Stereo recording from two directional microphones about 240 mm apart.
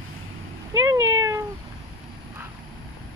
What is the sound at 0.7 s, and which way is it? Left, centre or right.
Cat, centre.